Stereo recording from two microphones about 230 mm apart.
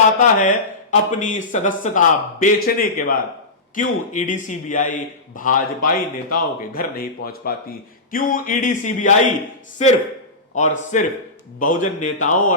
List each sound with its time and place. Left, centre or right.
0.2 s speech: left